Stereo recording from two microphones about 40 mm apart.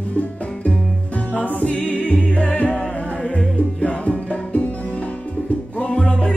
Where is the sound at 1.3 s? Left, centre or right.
Left.